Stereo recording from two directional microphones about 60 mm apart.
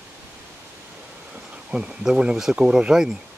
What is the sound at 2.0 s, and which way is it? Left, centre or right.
Speech, centre.